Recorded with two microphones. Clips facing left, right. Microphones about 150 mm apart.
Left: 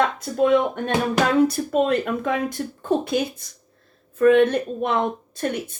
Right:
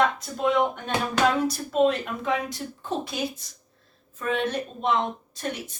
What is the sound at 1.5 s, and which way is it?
Speech, 55° left (ahead or behind).